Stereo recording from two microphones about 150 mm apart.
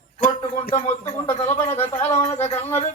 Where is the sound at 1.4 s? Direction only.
45° left (ahead or behind).